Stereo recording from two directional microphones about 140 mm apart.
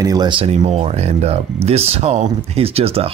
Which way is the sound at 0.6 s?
50° right (ahead or behind).